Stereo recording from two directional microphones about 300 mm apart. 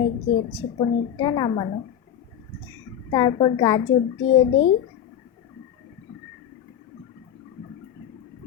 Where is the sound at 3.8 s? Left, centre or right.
Left.